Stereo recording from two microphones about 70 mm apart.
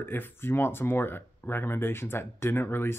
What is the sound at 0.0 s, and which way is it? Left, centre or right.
Speech, left.